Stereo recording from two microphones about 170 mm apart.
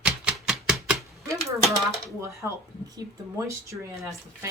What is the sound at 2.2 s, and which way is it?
A woman's voice, 15° right (ahead or behind).